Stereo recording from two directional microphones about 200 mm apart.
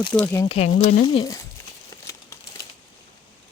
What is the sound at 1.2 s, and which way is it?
Speech, 15° left (ahead or behind).